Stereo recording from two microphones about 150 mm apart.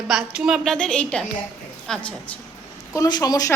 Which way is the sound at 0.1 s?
5° right (ahead or behind).